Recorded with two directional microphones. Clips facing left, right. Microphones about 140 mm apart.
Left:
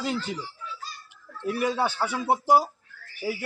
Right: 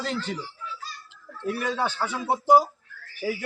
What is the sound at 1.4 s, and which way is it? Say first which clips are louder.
A man's voice: left 2 dB; 10° left (ahead or behind).